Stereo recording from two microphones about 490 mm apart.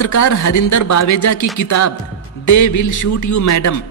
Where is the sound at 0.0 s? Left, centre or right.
Left.